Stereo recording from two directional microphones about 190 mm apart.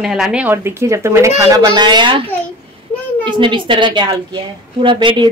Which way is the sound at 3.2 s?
25° right (ahead or behind).